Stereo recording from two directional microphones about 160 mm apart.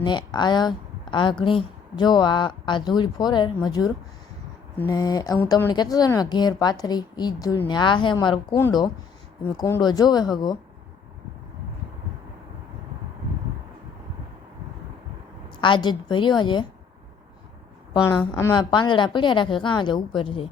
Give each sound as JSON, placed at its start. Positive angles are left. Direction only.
{"t": 0.0, "sound": "a woman's voice", "side_deg": 30}
{"t": 15.4, "sound": "speech", "side_deg": 30}
{"t": 18.0, "sound": "a woman's voice", "side_deg": 15}